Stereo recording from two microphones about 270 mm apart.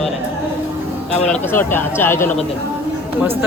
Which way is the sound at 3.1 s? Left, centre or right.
Centre.